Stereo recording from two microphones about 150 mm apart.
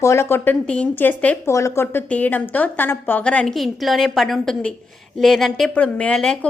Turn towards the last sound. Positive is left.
turn(degrees=5)  # may be behind; listen again after turning